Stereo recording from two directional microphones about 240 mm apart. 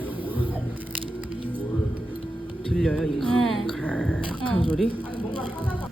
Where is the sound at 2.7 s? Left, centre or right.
Centre.